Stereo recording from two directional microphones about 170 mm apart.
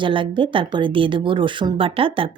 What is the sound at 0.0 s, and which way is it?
Speech, 30° right (ahead or behind).